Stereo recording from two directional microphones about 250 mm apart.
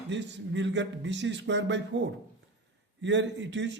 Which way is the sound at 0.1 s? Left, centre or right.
Right.